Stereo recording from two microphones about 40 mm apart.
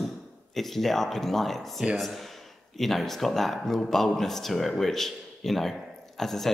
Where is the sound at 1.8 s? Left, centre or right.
Right.